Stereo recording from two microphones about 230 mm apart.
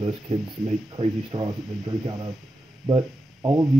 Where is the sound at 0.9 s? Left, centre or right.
Centre.